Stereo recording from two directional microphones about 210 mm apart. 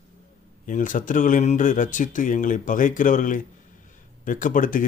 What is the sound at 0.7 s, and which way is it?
Speech, 40° left (ahead or behind).